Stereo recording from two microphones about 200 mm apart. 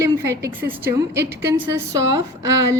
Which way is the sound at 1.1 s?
55° right (ahead or behind).